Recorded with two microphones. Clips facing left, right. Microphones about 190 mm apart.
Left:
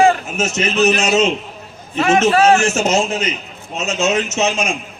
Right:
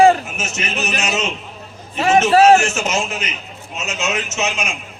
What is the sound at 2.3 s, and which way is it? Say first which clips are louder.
Speech: right 2 dB; 40° right (ahead or behind).